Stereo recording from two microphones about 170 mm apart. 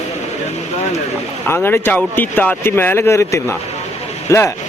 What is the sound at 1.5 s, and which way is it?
Speech, 15° left (ahead or behind).